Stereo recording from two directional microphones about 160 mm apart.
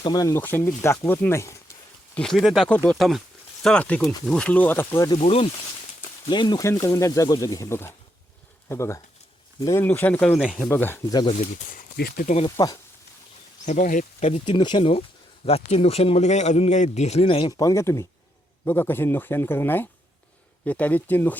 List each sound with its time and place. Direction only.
0.0 s speech: 25° left (ahead or behind)
2.1 s speech: centre (ahead or behind); by 5.2 s 20° left (ahead or behind)
5.2 s a man's voice: 40° left (ahead or behind); by 11.0 s 15° left (ahead or behind)
11.1 s speech: 25° left (ahead or behind)
11.9 s speech: 70° left (ahead or behind)
12.5 s speech: 25° left (ahead or behind)
13.7 s speech: 50° left (ahead or behind)
14.4 s a man's voice: 30° left (ahead or behind); by 21.3 s 10° left (ahead or behind)